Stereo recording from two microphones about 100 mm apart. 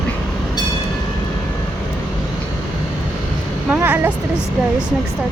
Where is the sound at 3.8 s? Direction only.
20° right (ahead or behind).